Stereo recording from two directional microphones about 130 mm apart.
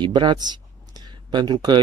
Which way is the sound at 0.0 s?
35° right (ahead or behind).